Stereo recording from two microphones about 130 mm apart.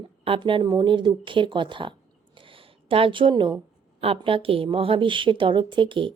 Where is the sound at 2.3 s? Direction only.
40° right (ahead or behind).